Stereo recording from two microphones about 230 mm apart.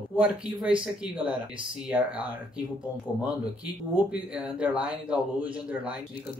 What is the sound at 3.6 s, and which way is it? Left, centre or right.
Speech, centre.